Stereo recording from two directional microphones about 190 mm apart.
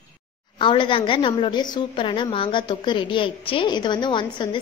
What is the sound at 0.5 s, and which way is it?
A woman's voice, 25° left (ahead or behind).